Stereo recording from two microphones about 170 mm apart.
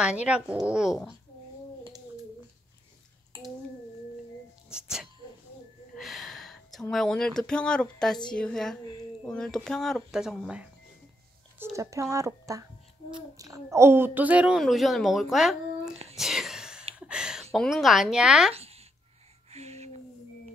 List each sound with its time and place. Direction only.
0.0 s a woman's voice: 5° right (ahead or behind)
4.6 s a woman's voice: 5° right (ahead or behind)
11.6 s a woman's voice: 20° right (ahead or behind); by 15.9 s centre (ahead or behind)
16.2 s whispering: centre (ahead or behind)
17.1 s speech: 5° right (ahead or behind)
18.5 s a sound: 35° right (ahead or behind)